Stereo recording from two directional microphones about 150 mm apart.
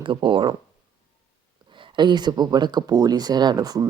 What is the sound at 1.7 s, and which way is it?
Speech, 35° right (ahead or behind).